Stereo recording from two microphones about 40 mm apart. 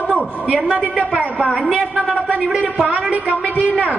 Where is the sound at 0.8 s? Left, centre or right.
Right.